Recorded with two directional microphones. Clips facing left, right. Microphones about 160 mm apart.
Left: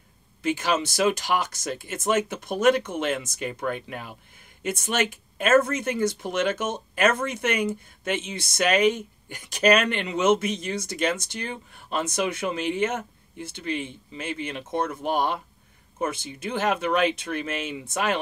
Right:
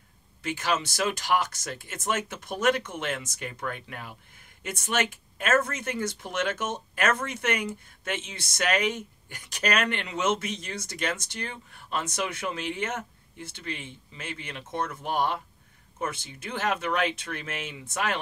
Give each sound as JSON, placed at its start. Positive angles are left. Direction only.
{"t": 0.4, "sound": "speech", "side_deg": 15}